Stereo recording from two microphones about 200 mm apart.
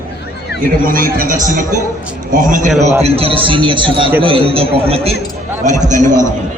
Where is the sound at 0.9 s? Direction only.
45° right (ahead or behind); by 5.1 s 30° right (ahead or behind).